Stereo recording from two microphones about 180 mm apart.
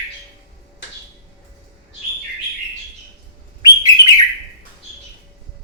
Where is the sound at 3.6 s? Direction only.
20° left (ahead or behind).